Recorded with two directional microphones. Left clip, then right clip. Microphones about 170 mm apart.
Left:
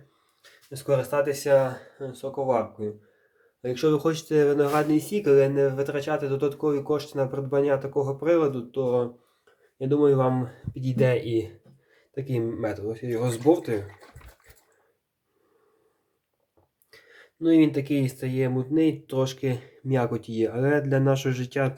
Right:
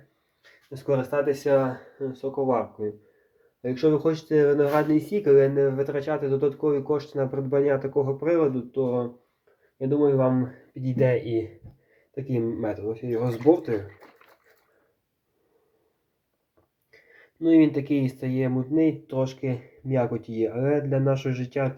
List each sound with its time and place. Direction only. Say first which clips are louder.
0.7 s speech: left 1 dB; 10° left (ahead or behind)
17.4 s speech: right 1 dB; 15° left (ahead or behind)